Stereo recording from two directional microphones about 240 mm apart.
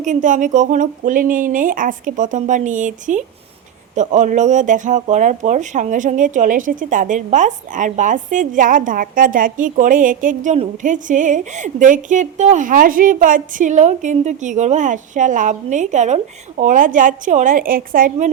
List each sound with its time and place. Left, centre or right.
0.0 s speech: right